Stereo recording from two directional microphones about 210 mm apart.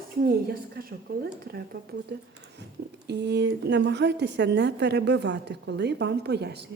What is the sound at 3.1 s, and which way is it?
A woman's voice, 55° right (ahead or behind).